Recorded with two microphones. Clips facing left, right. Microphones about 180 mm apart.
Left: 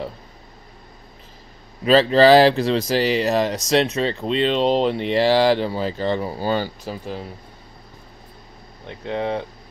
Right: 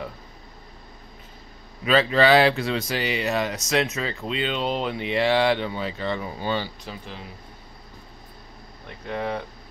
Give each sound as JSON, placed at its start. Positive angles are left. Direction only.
{"t": 1.9, "sound": "speech", "side_deg": 35}
{"t": 9.0, "sound": "speech", "side_deg": 25}